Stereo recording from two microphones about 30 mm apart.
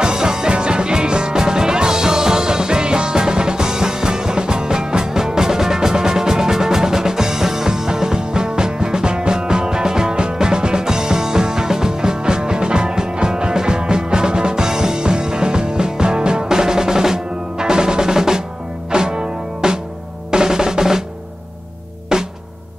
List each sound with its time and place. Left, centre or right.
0.0 s music: right
16.4 s percussion: centre
18.9 s music: right
20.2 s drum: right
22.1 s music: right